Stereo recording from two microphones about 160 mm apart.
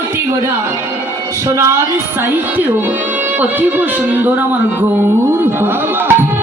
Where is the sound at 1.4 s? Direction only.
15° right (ahead or behind).